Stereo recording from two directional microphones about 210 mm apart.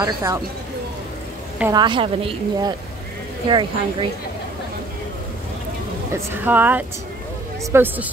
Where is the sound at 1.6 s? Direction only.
20° right (ahead or behind).